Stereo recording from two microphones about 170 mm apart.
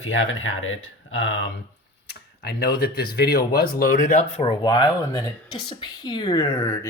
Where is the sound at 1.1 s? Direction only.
90° left.